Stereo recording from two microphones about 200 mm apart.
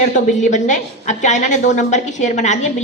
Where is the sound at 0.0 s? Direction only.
40° left (ahead or behind).